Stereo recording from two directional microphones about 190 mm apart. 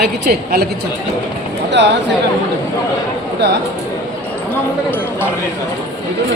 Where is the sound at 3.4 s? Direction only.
65° right (ahead or behind).